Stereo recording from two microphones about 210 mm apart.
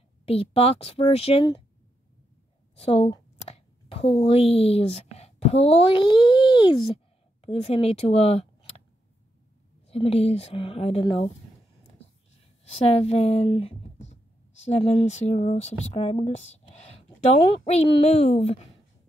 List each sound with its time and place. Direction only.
0.2 s speech: 25° left (ahead or behind)
2.7 s a woman's voice: 30° left (ahead or behind)
9.8 s speech: 30° left (ahead or behind)
12.6 s speech: 30° left (ahead or behind)